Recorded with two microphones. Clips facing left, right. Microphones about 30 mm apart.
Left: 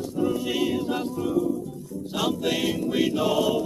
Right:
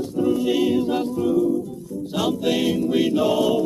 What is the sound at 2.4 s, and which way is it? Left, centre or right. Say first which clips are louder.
Music: right 4 dB; centre.